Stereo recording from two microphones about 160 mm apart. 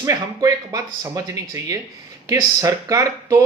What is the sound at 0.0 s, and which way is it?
Speech, 20° right (ahead or behind).